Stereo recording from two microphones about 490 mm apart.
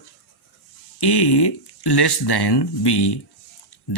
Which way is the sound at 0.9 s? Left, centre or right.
Left.